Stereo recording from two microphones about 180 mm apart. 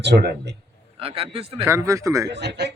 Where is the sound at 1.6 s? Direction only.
15° right (ahead or behind).